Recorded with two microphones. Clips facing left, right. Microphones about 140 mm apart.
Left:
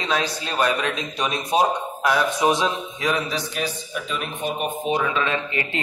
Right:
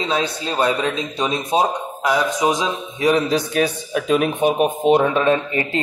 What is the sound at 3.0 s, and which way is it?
Speech, 35° right (ahead or behind).